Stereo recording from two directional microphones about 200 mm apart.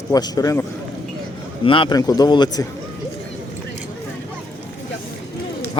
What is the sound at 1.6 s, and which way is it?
Speech, 25° left (ahead or behind).